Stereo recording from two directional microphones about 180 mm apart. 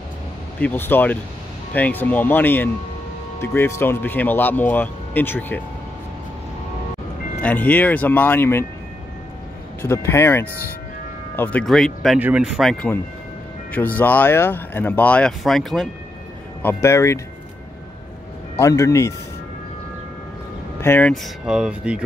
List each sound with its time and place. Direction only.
0.6 s speech: 10° left (ahead or behind)
7.4 s speech: 10° left (ahead or behind)
9.8 s speech: 15° left (ahead or behind); by 12.7 s 5° right (ahead or behind)
13.7 s speech: 10° left (ahead or behind)
16.6 s speech: 15° left (ahead or behind)
18.6 s speech: 15° left (ahead or behind)
20.8 s speech: 10° left (ahead or behind)
21.5 s speech: 5° right (ahead or behind)